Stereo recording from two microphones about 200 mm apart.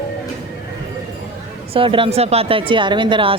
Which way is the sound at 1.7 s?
25° right (ahead or behind).